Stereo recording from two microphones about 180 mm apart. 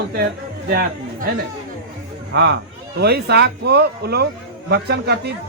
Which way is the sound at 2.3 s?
70° right (ahead or behind).